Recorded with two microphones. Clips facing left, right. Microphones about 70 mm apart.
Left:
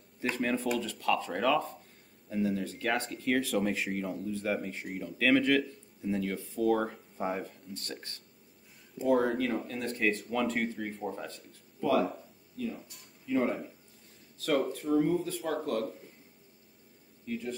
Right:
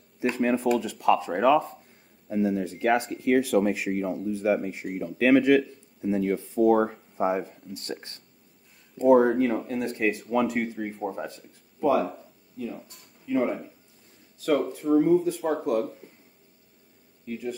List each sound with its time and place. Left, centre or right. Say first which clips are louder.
0.4 s speech: right 7 dB; centre
12.1 s a sound: right 2 dB; centre
13.3 s speech: right 4 dB; centre
17.3 s speech: right 3 dB; centre